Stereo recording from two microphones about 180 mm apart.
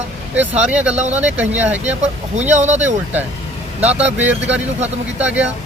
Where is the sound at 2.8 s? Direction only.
10° right (ahead or behind).